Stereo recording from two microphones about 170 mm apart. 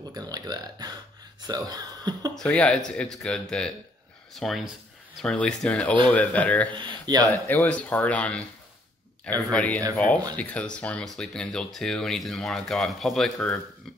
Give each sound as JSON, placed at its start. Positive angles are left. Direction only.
{"t": 0.1, "sound": "speech", "side_deg": -25}
{"t": 2.3, "sound": "speech", "side_deg": 5}
{"t": 6.7, "sound": "speech", "side_deg": -30}
{"t": 7.2, "sound": "speech", "side_deg": 10}
{"t": 9.5, "sound": "speech", "side_deg": 5}